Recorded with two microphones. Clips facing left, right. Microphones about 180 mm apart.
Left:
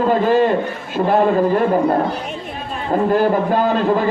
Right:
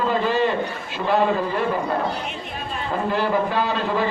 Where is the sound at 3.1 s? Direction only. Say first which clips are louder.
Left 5 dB; 50° left (ahead or behind).